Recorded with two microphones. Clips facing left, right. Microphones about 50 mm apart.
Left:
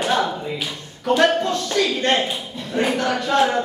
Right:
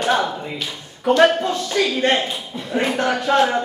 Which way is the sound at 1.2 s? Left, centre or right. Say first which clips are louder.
Right 2 dB; centre.